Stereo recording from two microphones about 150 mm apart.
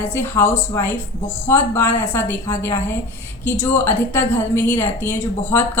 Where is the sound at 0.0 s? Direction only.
15° left (ahead or behind).